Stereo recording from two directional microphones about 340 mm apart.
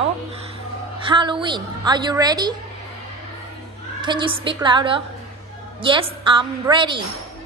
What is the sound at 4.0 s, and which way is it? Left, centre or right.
A woman's voice, centre.